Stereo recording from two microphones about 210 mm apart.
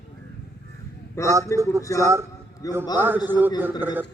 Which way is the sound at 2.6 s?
15° left (ahead or behind).